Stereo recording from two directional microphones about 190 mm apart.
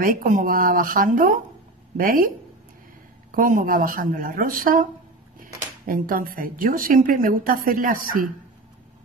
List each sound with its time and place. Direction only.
0.0 s a woman's voice: 45° right (ahead or behind)
5.9 s a woman's voice: 45° right (ahead or behind)